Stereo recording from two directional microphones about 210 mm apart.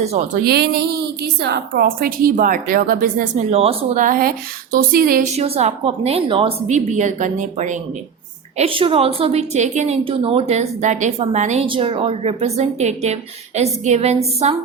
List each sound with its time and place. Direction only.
0.0 s a woman's voice: 30° right (ahead or behind)
0.4 s a woman's voice: 50° right (ahead or behind)
5.4 s a woman's voice: 30° right (ahead or behind)